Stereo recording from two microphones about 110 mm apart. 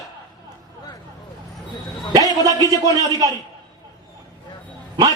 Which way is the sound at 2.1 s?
35° right (ahead or behind).